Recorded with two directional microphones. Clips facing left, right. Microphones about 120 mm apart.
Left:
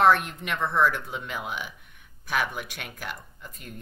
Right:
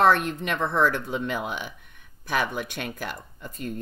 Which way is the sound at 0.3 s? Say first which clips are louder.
Right 2 dB; 30° right (ahead or behind).